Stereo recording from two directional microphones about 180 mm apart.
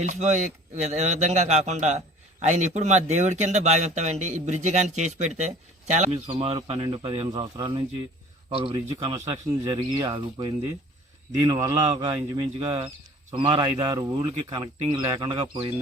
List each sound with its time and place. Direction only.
0.0 s speech: 40° right (ahead or behind)